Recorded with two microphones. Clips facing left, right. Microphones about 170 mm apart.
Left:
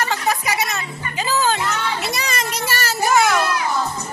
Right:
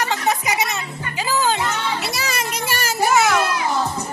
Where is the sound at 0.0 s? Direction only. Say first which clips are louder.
Even; 15° right (ahead or behind).